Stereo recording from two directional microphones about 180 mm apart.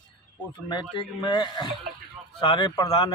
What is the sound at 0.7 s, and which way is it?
A man's voice, 25° left (ahead or behind).